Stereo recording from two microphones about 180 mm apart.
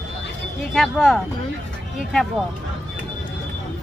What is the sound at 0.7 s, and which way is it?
Speech, centre (ahead or behind).